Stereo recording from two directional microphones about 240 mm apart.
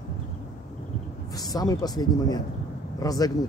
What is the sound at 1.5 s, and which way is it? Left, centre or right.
Speech, centre.